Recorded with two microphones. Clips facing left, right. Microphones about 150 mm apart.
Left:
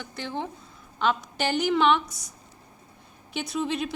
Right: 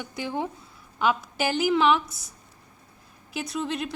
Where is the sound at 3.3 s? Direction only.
Centre (ahead or behind).